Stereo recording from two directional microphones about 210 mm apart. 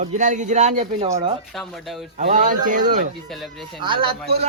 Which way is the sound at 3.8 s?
25° right (ahead or behind).